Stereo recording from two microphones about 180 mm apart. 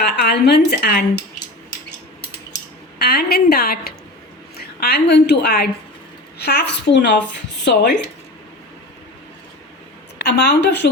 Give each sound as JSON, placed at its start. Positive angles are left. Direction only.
{"t": 0.0, "sound": "a woman's voice", "side_deg": 65}
{"t": 3.0, "sound": "a woman's voice", "side_deg": 60}
{"t": 10.2, "sound": "a woman's voice", "side_deg": 65}